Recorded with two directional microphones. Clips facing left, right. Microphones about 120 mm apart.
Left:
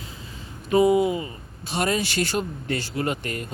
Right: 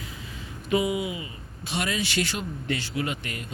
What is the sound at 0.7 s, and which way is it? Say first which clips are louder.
Speech: left 7 dB; 40° left (ahead or behind).